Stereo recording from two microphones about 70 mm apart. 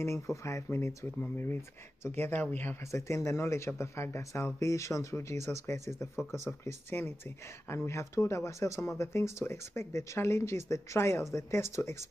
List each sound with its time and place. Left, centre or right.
0.0 s speech: left
2.0 s speech: left
2.8 s speech: left